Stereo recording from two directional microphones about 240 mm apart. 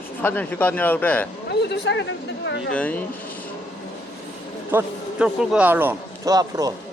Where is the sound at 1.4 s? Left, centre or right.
Left.